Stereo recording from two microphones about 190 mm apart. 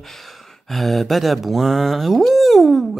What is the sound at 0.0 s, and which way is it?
Speech, centre (ahead or behind).